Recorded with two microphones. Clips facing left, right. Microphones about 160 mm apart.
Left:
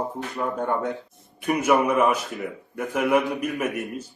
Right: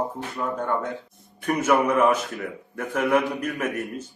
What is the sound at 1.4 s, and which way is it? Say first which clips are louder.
A man's voice: left 1 dB; 10° left (ahead or behind).